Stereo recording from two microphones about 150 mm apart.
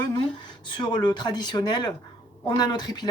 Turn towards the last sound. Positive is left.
turn(degrees=25)  # may be behind; listen again after turning